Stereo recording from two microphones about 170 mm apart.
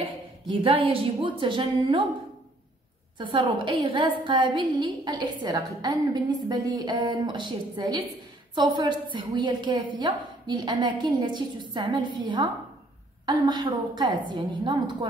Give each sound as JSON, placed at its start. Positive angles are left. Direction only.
{"t": 0.5, "sound": "a woman's voice", "side_deg": -30}
{"t": 3.2, "sound": "a woman's voice", "side_deg": -30}